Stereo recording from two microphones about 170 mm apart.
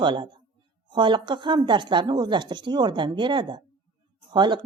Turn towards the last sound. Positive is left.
turn(degrees=-25)  # may be behind; listen again after turning